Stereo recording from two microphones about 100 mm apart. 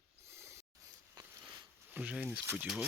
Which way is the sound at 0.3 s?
30° right (ahead or behind).